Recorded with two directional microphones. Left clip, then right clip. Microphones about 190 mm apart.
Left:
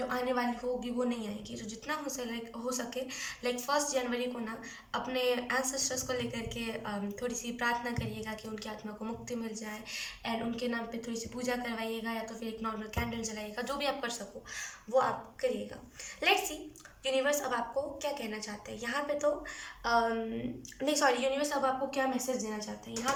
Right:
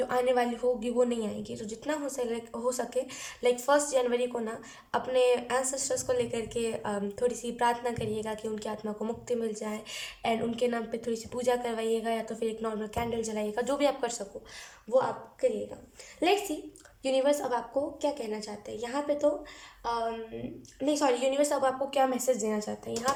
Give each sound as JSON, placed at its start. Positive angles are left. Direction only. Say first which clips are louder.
{"t": 0.1, "sound": "a woman's voice", "louder": "right 6 dB", "side_deg": -40}
{"t": 14.9, "sound": "a woman's voice", "louder": "right 2 dB", "side_deg": -25}
{"t": 19.8, "sound": "speech", "louder": "left 2 dB", "side_deg": -10}
{"t": 21.2, "sound": "a woman's voice", "louder": "right 4 dB", "side_deg": -35}